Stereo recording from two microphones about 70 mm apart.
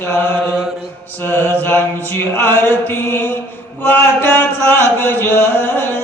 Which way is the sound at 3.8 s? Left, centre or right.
Left.